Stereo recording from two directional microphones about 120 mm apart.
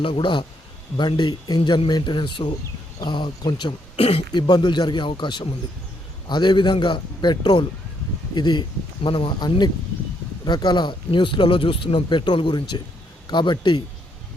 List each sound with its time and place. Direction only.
0.0 s speech: 45° left (ahead or behind)
3.9 s speech: 55° left (ahead or behind)
4.3 s speech: 35° left (ahead or behind)